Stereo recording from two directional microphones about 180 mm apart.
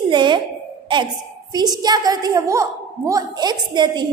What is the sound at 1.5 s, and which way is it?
A woman's voice, 20° right (ahead or behind).